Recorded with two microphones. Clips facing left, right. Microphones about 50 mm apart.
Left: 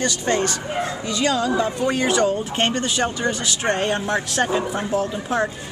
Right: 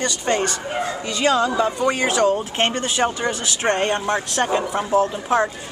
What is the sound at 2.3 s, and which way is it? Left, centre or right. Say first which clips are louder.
Speech: right 1 dB; centre.